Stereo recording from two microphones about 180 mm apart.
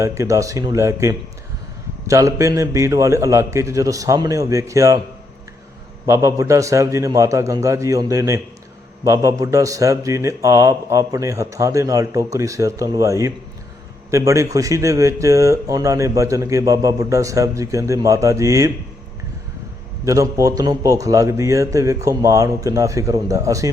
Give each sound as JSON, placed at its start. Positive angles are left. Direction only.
{"t": 0.0, "sound": "speech", "side_deg": -15}
{"t": 6.1, "sound": "speech", "side_deg": -15}
{"t": 20.1, "sound": "speech", "side_deg": -15}